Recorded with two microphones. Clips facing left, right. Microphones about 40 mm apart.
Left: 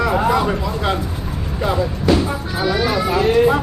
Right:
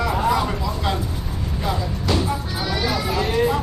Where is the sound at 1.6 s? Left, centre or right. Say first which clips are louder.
Left 6 dB; centre.